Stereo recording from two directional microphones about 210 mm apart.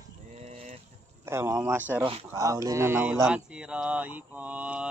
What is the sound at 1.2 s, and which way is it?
Mantra, 15° right (ahead or behind).